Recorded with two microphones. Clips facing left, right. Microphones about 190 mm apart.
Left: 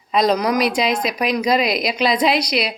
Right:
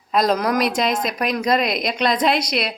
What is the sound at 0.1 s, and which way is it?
Speech, centre (ahead or behind).